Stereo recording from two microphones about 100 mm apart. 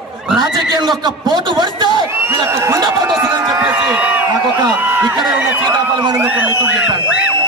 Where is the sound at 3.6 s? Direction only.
15° right (ahead or behind).